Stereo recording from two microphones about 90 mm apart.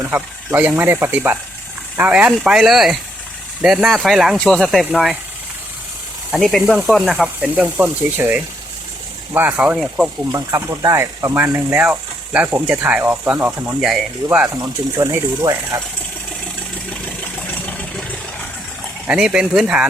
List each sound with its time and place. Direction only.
0.0 s speech: 20° right (ahead or behind)
2.4 s speech: 5° right (ahead or behind)
6.3 s speech: centre (ahead or behind)
7.5 s speech: 20° right (ahead or behind)
10.3 s speech: 35° right (ahead or behind)
14.4 s speech: 35° right (ahead or behind)
17.7 s vehicle: 15° left (ahead or behind)
19.0 s speech: 10° right (ahead or behind)